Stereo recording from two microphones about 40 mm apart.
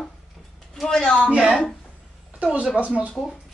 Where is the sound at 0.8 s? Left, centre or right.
Centre.